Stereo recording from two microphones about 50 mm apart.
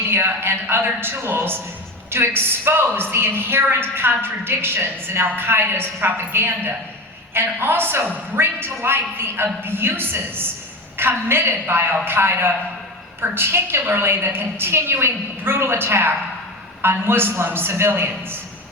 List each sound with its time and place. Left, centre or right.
0.1 s a woman's voice: right